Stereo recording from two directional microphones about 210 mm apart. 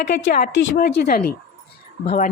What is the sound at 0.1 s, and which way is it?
A woman's voice, 50° left (ahead or behind).